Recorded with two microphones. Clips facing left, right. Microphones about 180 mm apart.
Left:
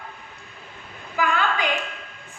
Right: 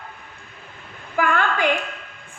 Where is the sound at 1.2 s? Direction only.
55° right (ahead or behind).